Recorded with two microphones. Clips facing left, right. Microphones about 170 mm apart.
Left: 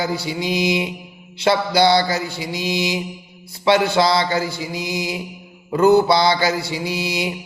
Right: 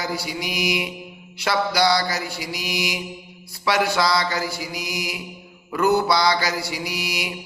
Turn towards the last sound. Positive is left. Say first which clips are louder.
# left 6 dB
turn(degrees=25)  # may be behind; listen again after turning